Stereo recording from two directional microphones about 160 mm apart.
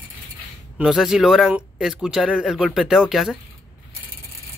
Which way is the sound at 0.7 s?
5° right (ahead or behind).